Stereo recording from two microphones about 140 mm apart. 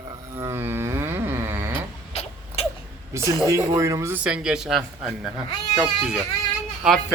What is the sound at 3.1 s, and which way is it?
Speech, 20° right (ahead or behind).